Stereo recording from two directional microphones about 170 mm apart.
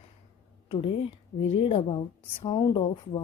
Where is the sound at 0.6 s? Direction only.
30° left (ahead or behind).